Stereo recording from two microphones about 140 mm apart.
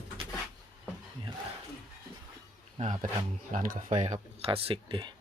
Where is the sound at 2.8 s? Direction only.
60° right (ahead or behind).